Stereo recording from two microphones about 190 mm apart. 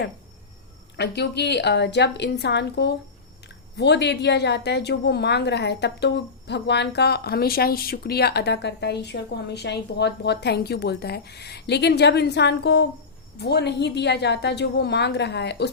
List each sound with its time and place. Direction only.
0.9 s a woman's voice: 60° left (ahead or behind)